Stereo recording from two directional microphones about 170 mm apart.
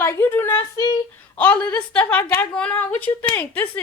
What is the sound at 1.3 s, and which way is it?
A woman's voice, 10° left (ahead or behind).